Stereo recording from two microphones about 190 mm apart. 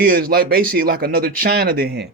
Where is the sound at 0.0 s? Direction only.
50° right (ahead or behind).